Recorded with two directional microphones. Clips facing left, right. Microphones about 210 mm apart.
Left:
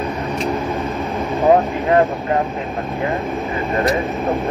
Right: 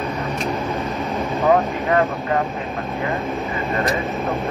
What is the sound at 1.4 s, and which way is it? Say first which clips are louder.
Speech: left 4 dB; 30° left (ahead or behind).